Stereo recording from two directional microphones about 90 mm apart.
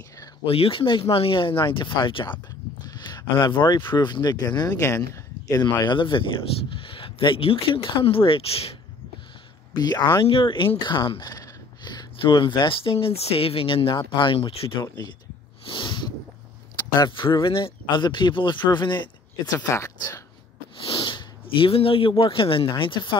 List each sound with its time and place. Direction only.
0.5 s speech: 90° left; by 2.4 s 65° left (ahead or behind)
2.8 s a sound: 50° left (ahead or behind)
3.9 s speech: 55° left (ahead or behind)
4.8 s speech: 30° left (ahead or behind)
5.9 s speech: 65° left (ahead or behind)
6.7 s speech: 75° left (ahead or behind)
9.8 s speech: 50° left (ahead or behind)
11.2 s speech: 50° left (ahead or behind); by 14.9 s 90° left
15.6 s snort: 65° left (ahead or behind)
17.1 s speech: 65° left (ahead or behind)
19.7 s speech: 35° left (ahead or behind)
20.8 s speech: 70° left (ahead or behind)